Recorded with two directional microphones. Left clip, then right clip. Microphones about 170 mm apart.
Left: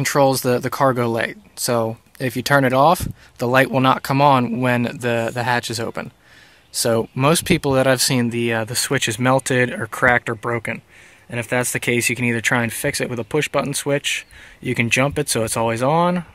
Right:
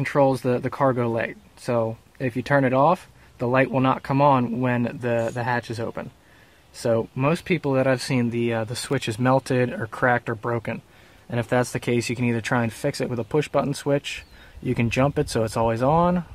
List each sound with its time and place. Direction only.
0.0 s speech: 25° left (ahead or behind)